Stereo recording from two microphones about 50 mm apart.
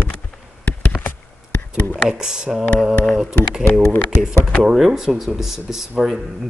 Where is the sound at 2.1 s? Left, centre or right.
Centre.